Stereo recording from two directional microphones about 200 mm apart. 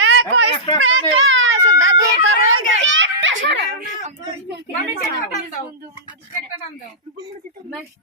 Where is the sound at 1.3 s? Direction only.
70° right (ahead or behind).